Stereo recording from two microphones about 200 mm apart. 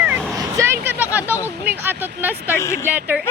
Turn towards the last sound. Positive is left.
turn(degrees=-10)  # may be behind; listen again after turning